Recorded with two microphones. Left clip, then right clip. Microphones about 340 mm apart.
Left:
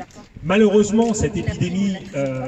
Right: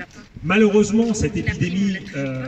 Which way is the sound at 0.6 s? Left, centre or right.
Left.